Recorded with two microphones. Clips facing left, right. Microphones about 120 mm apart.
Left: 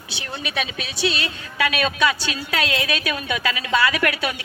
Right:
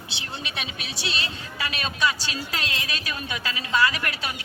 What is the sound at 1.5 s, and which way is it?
A man's voice, 90° left.